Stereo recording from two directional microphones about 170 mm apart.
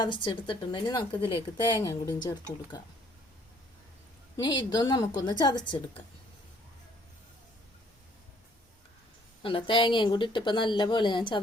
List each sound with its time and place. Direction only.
0.0 s speech: 30° left (ahead or behind)
1.2 s speech: 15° right (ahead or behind)
1.8 s speech: 25° left (ahead or behind)
4.4 s speech: 25° left (ahead or behind)
9.4 s speech: 30° left (ahead or behind)